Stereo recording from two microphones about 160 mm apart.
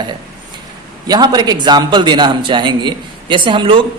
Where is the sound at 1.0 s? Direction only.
25° right (ahead or behind).